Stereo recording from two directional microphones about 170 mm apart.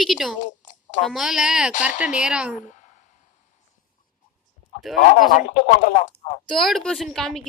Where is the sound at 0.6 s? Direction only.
45° left (ahead or behind).